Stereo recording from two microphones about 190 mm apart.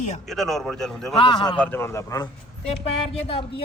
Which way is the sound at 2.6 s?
30° left (ahead or behind).